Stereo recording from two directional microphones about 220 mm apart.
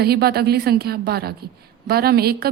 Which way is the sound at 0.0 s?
45° right (ahead or behind).